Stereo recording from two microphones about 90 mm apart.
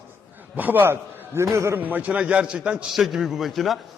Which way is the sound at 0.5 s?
20° right (ahead or behind).